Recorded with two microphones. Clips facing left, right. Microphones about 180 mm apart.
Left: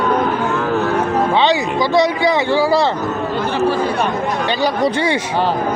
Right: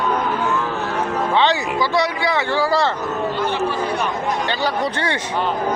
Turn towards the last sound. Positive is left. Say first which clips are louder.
# left 5 dB
turn(degrees=10)  # may be behind; listen again after turning